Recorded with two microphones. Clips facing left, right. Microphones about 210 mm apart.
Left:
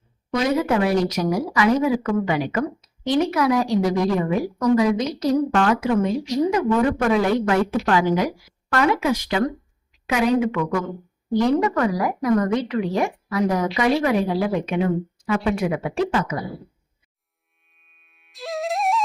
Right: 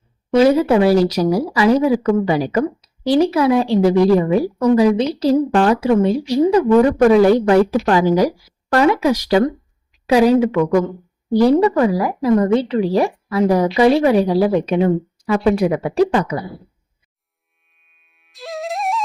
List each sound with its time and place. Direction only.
0.3 s speech: 30° right (ahead or behind)
17.7 s music: centre (ahead or behind)